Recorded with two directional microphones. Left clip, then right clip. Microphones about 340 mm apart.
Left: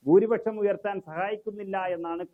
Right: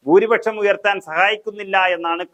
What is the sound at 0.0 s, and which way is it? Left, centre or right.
Speech, centre.